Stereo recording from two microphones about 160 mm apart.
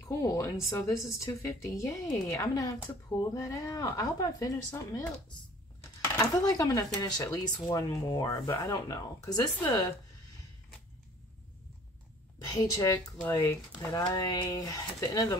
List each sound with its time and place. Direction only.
0.2 s speech: 20° left (ahead or behind)
12.4 s speech: 25° left (ahead or behind)